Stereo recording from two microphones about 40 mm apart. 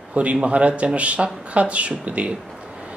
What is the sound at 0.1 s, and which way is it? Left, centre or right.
Speech, right.